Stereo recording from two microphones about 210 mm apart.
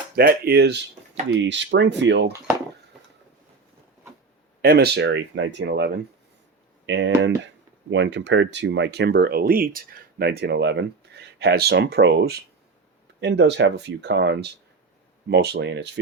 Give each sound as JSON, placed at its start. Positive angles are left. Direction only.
{"t": 0.2, "sound": "speech", "side_deg": -45}
{"t": 4.6, "sound": "speech", "side_deg": -50}